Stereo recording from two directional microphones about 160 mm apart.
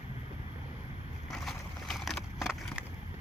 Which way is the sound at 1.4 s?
Centre (ahead or behind).